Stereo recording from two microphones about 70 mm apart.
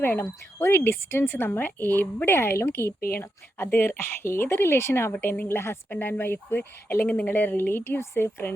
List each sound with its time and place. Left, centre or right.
0.0 s a woman's voice: left